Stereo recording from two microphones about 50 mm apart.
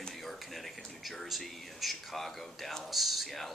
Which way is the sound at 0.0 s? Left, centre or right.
Centre.